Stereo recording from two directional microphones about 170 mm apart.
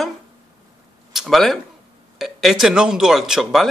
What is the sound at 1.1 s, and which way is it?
Speech, centre (ahead or behind).